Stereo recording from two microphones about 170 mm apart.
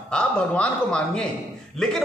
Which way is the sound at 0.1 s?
5° left (ahead or behind).